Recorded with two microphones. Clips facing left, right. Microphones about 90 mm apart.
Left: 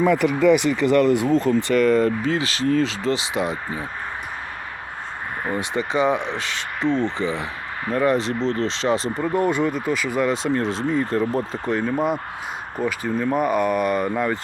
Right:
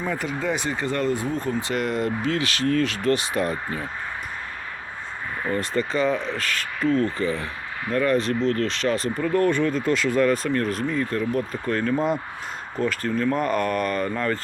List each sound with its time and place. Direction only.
0.0 s speech: 80° left
2.0 s speech: 35° left (ahead or behind)
5.5 s speech: 15° left (ahead or behind)
10.5 s speech: 25° left (ahead or behind)
11.8 s speech: 10° left (ahead or behind)